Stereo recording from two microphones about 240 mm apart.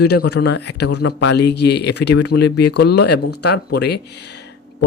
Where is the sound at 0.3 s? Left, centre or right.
Left.